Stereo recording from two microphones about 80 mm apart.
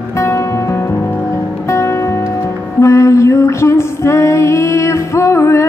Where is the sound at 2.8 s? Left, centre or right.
Left.